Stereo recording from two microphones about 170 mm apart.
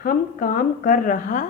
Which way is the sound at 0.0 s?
55° left (ahead or behind).